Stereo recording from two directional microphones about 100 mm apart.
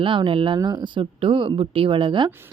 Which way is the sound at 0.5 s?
45° right (ahead or behind).